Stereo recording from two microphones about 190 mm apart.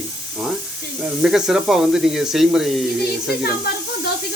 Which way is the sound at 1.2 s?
Centre (ahead or behind).